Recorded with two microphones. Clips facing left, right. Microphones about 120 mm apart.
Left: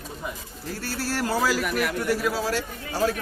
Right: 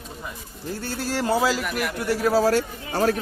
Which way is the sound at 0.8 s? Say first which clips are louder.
Right 1 dB; 20° right (ahead or behind).